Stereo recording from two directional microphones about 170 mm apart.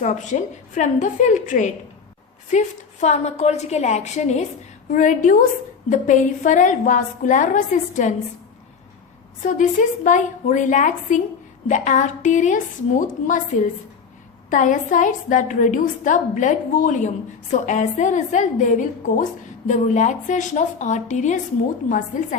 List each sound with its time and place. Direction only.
0.0 s a woman's voice: 45° left (ahead or behind)
9.4 s a woman's voice: 50° left (ahead or behind)